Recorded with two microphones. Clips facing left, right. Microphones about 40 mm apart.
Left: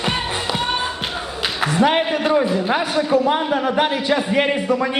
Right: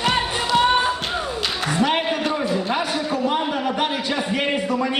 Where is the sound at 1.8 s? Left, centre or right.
Centre.